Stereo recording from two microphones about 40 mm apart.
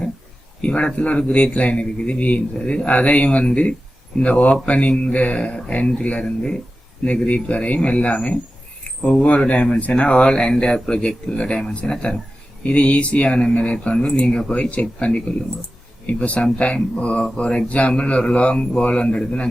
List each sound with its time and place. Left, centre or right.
0.6 s a man's voice: left
14.5 s speech: left
16.2 s a man's voice: left